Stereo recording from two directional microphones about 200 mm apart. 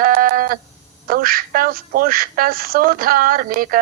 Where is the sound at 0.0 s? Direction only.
45° right (ahead or behind).